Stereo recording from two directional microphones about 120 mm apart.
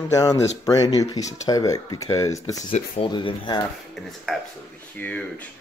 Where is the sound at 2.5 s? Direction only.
90° left.